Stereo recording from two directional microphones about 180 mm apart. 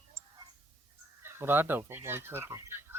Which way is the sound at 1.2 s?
15° right (ahead or behind).